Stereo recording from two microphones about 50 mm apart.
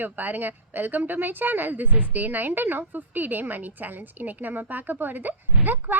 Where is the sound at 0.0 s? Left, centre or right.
Right.